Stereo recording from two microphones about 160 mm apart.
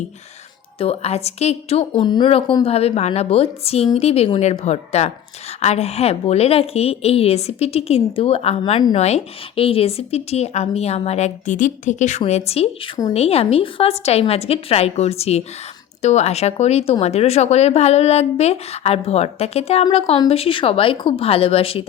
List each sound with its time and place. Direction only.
0.8 s speech: 40° left (ahead or behind)